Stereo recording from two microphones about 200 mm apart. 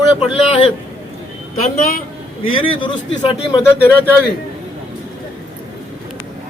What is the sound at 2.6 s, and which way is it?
Speech, 25° left (ahead or behind).